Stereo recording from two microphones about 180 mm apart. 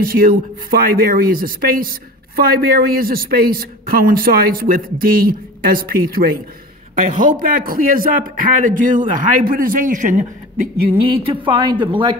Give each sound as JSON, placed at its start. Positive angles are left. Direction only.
{"t": 0.0, "sound": "speech", "side_deg": -50}
{"t": 11.4, "sound": "a woman's voice", "side_deg": -25}